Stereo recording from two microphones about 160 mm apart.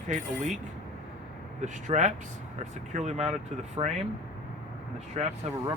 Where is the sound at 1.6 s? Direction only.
45° right (ahead or behind).